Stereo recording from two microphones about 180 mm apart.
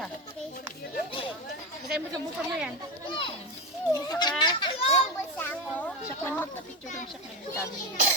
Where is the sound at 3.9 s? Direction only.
20° left (ahead or behind).